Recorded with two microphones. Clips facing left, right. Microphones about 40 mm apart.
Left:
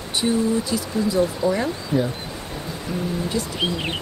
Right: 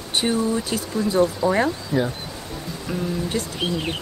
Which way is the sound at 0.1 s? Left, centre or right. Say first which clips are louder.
Left 1 dB; right.